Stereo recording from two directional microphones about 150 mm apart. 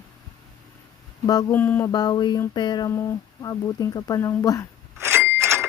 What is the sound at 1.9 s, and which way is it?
Speech, 25° left (ahead or behind).